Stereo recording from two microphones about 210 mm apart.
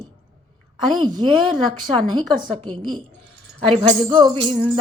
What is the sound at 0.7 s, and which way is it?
Music, 20° right (ahead or behind).